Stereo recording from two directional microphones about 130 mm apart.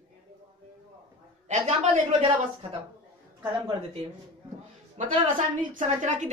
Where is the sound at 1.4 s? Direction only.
65° right (ahead or behind).